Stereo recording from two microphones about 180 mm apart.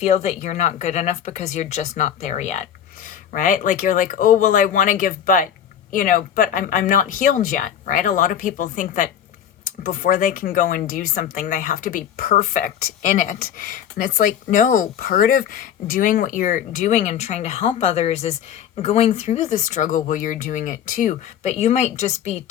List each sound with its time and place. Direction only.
0.0 s a woman's voice: 40° left (ahead or behind)